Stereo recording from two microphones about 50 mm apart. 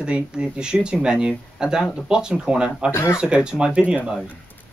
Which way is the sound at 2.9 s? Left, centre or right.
Left.